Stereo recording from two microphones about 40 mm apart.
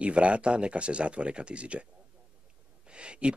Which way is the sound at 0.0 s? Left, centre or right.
Right.